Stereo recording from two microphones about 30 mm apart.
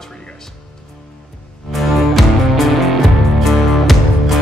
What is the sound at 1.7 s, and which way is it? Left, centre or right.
Music, centre.